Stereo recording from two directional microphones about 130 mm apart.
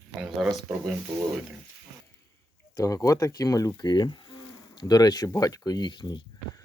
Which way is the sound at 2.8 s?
25° left (ahead or behind).